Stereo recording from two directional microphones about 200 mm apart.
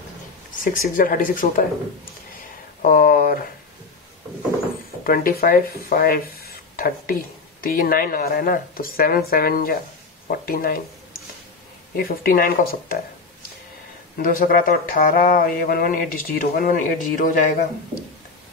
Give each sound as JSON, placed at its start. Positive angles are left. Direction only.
{"t": 0.7, "sound": "speech", "side_deg": 45}
{"t": 2.8, "sound": "speech", "side_deg": 45}
{"t": 5.0, "sound": "speech", "side_deg": 45}
{"t": 12.0, "sound": "speech", "side_deg": 45}
{"t": 14.1, "sound": "speech", "side_deg": 45}